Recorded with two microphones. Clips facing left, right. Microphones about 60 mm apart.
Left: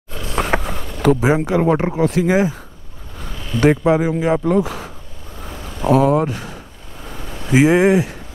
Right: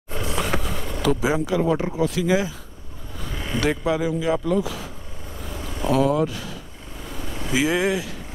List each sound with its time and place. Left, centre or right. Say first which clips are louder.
0.3 s speech: left 6 dB; left
3.8 s speech: left 6 dB; left
5.5 s vehicle: left 7 dB; left
7.4 s speech: left 9 dB; left